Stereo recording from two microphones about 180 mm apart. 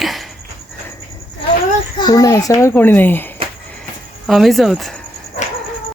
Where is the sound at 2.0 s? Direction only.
20° left (ahead or behind).